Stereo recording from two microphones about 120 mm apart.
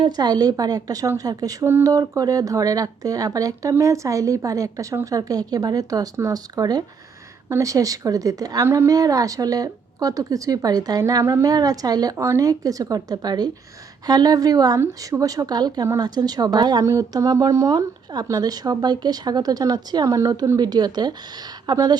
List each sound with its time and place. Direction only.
0.0 s a woman's voice: 35° right (ahead or behind)